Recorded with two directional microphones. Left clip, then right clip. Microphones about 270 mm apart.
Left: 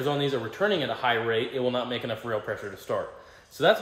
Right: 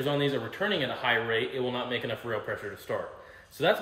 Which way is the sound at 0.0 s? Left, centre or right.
Centre.